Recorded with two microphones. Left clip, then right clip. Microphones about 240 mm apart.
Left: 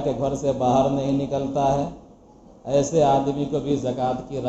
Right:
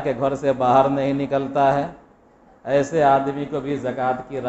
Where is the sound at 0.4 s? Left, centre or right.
Right.